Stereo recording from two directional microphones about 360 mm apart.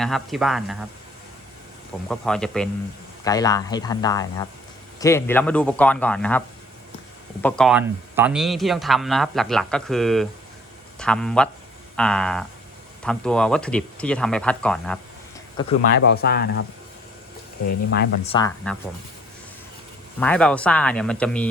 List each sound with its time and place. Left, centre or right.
0.0 s speech: centre
2.0 s speech: centre
7.4 s speech: centre
15.9 s speech: left
18.3 s speech: centre
20.1 s speech: centre